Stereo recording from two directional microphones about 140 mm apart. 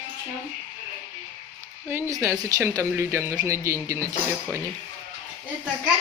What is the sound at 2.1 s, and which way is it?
Speech, 25° right (ahead or behind).